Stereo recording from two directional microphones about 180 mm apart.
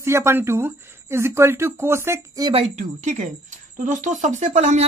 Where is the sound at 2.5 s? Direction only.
40° right (ahead or behind).